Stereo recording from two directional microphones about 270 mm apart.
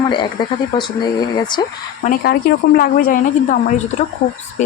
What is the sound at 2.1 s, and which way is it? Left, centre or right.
A woman's voice, left.